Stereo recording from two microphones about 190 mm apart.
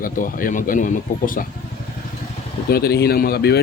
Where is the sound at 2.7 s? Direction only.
55° left (ahead or behind).